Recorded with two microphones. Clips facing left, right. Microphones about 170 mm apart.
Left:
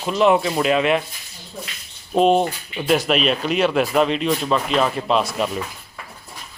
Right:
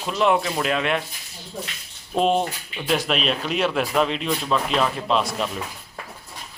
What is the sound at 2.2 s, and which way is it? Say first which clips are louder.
Speech: left 4 dB; centre (ahead or behind).